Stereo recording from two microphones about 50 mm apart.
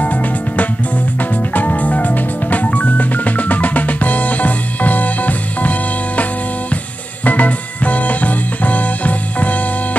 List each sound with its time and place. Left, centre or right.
0.0 s music: left
7.2 s music: left